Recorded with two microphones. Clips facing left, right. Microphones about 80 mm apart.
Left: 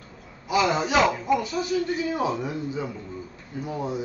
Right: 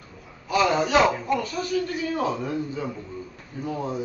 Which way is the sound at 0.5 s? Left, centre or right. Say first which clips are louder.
Right 1 dB; centre.